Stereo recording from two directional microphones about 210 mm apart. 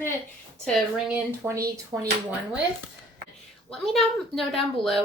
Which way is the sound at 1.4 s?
15° right (ahead or behind).